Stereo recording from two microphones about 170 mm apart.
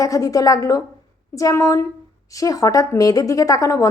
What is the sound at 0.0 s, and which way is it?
A woman's voice, 20° left (ahead or behind).